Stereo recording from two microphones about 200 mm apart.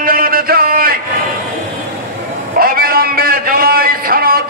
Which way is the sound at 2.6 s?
50° right (ahead or behind).